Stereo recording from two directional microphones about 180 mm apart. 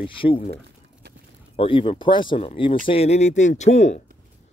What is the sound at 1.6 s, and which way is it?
Speech, 30° left (ahead or behind).